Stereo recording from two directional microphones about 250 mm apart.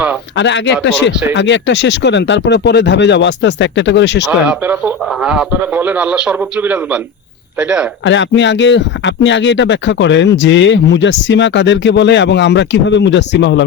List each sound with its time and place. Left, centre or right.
0.3 s speech: left
4.3 s a man's voice: centre
8.0 s speech: left